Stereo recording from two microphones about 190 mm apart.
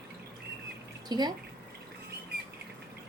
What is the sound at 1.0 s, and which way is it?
Speech, 20° right (ahead or behind).